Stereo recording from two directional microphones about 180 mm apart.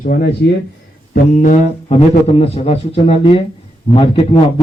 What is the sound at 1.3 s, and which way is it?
A man's voice, 45° left (ahead or behind).